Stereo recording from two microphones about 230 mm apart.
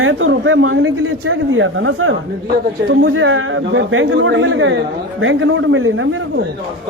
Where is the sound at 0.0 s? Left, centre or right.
Right.